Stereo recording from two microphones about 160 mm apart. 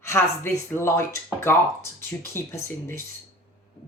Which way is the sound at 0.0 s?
15° left (ahead or behind).